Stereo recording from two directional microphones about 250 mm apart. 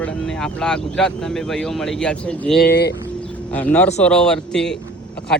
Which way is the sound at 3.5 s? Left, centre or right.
Centre.